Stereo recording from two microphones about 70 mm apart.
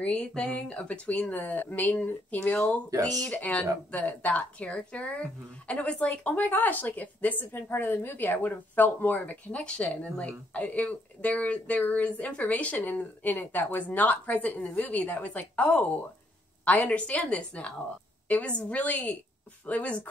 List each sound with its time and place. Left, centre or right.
0.0 s a woman's voice: centre